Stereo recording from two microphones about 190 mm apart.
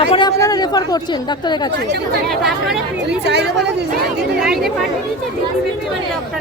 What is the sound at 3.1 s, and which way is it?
Speech, 65° right (ahead or behind).